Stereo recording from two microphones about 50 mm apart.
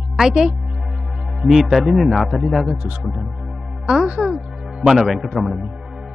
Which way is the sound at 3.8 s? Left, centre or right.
Centre.